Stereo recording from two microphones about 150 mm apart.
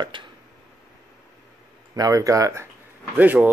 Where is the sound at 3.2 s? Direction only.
10° right (ahead or behind).